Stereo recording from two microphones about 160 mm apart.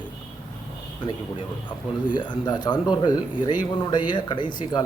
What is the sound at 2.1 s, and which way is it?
Speech, 30° left (ahead or behind).